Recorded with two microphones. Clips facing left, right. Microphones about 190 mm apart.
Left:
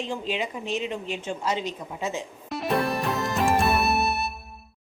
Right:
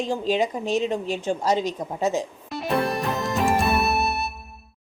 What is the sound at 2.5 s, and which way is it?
Music, centre (ahead or behind).